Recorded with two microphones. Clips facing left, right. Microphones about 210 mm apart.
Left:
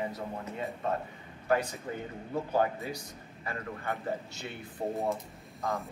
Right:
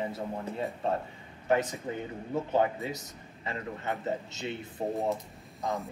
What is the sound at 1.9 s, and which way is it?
A man's voice, 20° right (ahead or behind).